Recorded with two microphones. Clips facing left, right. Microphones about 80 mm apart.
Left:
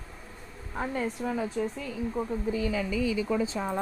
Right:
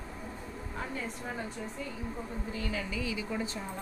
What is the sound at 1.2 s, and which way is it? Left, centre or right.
Speech, left.